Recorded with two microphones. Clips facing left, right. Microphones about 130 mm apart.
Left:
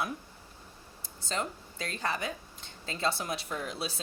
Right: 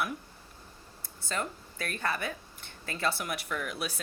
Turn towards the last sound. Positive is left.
turn(degrees=25)  # may be behind; listen again after turning